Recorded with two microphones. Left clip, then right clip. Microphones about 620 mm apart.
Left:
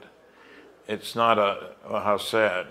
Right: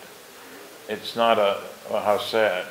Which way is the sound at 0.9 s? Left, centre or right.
Left.